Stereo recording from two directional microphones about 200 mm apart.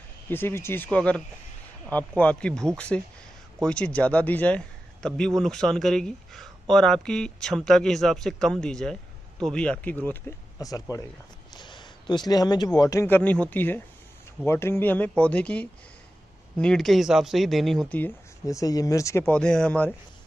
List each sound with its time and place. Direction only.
0.3 s a man's voice: 10° left (ahead or behind)